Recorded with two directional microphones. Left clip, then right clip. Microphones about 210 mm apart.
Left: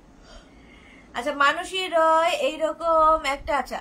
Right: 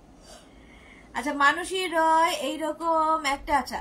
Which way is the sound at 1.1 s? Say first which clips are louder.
Left 1 dB; 15° left (ahead or behind).